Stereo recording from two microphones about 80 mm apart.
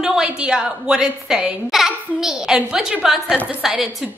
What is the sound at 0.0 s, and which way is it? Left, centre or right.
A woman's voice, centre.